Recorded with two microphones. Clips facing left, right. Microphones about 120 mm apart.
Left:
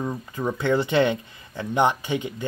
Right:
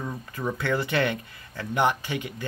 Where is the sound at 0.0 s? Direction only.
20° left (ahead or behind).